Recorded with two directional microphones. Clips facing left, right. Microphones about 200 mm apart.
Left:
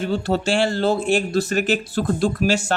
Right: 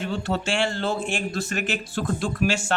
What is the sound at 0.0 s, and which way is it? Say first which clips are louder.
A man's voice: left 5 dB; 35° left (ahead or behind).